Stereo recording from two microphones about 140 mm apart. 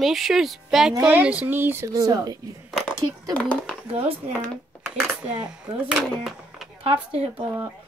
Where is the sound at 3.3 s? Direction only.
10° left (ahead or behind).